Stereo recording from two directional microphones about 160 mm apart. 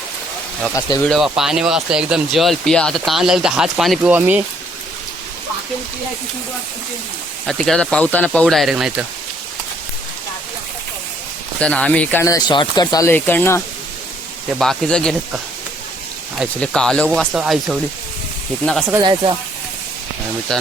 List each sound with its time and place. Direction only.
0.7 s speech: 20° left (ahead or behind)
1.0 s speech: centre (ahead or behind)
7.4 s speech: 5° left (ahead or behind)
11.6 s speech: 5° left (ahead or behind)
12.2 s speech: 25° left (ahead or behind)
13.1 s speech: 10° left (ahead or behind)
14.6 s speech: 5° left (ahead or behind)
16.4 s speech: 5° left (ahead or behind)
18.6 s speech: 5° left (ahead or behind)
18.9 s speech: 30° right (ahead or behind)
20.5 s speech: 5° left (ahead or behind)